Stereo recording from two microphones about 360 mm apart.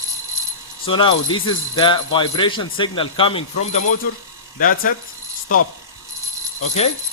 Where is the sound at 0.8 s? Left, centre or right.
Centre.